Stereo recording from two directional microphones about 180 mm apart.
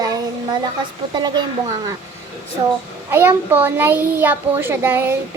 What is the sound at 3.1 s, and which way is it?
A child's voice, 10° right (ahead or behind).